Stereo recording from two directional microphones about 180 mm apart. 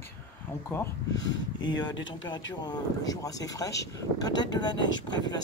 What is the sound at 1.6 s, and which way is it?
Speech, 25° left (ahead or behind).